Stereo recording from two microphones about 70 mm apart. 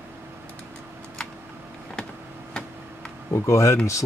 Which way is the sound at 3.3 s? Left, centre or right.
Left.